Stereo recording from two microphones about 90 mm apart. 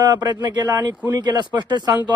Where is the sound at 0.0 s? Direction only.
45° right (ahead or behind).